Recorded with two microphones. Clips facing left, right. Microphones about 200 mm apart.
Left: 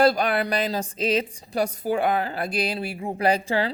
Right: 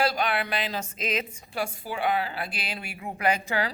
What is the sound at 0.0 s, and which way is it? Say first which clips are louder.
A woman's voice: left 6 dB; 40° left (ahead or behind).